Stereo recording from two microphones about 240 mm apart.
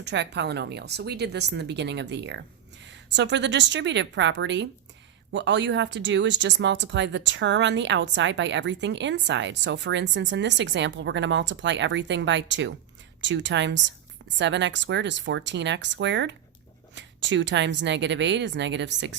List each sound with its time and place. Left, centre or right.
0.0 s speech: right